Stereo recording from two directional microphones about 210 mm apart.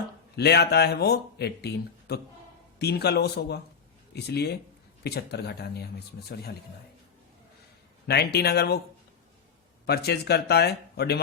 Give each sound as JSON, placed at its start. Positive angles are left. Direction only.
{"t": 0.3, "sound": "speech", "side_deg": 50}
{"t": 8.0, "sound": "speech", "side_deg": 50}
{"t": 9.8, "sound": "speech", "side_deg": 50}